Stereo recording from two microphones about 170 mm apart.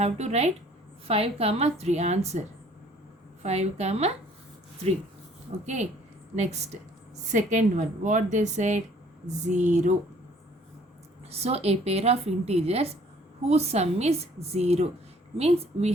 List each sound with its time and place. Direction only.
0.0 s a woman's voice: 40° right (ahead or behind)
3.4 s a woman's voice: 40° right (ahead or behind)
5.6 s a woman's voice: 40° right (ahead or behind)
11.3 s a woman's voice: 40° right (ahead or behind)